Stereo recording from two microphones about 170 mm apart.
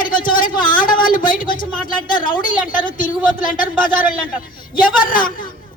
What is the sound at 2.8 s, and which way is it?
Speech, 55° left (ahead or behind).